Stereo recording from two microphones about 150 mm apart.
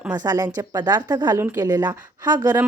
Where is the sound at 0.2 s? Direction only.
25° right (ahead or behind).